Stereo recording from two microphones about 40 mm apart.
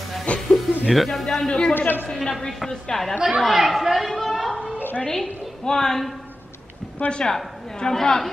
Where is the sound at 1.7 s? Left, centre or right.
Left.